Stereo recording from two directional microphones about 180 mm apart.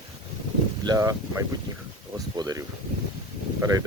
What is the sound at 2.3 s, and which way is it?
Speech, 20° right (ahead or behind).